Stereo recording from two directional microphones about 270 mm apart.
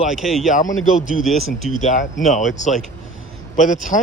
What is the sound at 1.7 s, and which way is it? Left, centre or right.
Speech, left.